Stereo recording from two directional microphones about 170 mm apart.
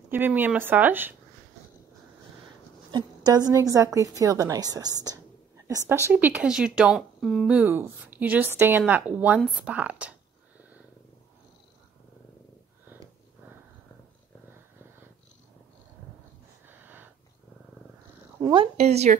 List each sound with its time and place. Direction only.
0.1 s speech: 10° right (ahead or behind)
2.9 s a woman's voice: 25° right (ahead or behind)
6.0 s speech: 10° right (ahead or behind)
16.6 s a sound: 10° right (ahead or behind)
18.4 s speech: 30° right (ahead or behind)